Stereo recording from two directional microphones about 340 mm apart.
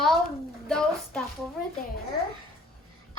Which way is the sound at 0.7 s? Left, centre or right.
Centre.